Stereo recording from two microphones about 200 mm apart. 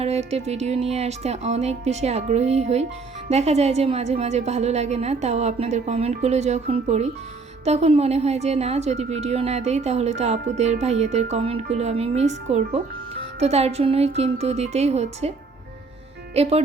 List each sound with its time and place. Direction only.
0.0 s a woman's voice: 30° right (ahead or behind)
16.3 s speech: 30° right (ahead or behind)